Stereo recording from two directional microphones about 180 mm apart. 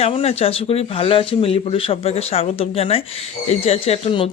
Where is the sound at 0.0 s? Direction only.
35° left (ahead or behind).